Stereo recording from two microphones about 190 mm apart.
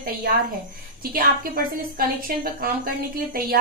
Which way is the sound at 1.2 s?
50° right (ahead or behind).